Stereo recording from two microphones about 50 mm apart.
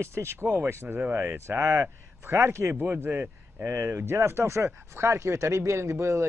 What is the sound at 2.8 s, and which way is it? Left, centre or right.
Speech, right.